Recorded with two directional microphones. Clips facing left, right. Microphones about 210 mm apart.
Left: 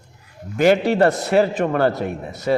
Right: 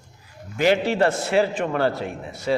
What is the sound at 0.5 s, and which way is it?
A man's voice, 50° left (ahead or behind).